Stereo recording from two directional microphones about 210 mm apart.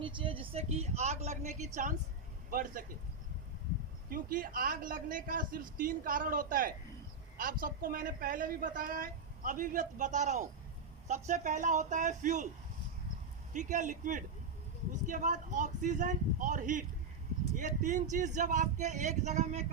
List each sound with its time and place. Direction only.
0.0 s speech: 25° right (ahead or behind); by 2.8 s 40° right (ahead or behind)
4.1 s speech: 40° right (ahead or behind)
13.5 s speech: 35° right (ahead or behind)